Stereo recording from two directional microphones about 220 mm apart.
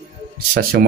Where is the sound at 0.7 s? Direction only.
45° right (ahead or behind).